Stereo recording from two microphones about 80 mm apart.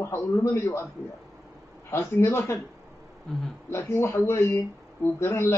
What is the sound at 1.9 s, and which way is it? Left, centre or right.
Speech, left.